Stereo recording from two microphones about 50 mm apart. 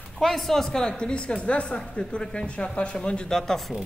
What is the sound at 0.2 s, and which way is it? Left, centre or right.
Speech, centre.